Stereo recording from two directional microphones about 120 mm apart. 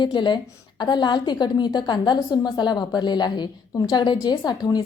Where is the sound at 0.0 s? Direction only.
40° left (ahead or behind).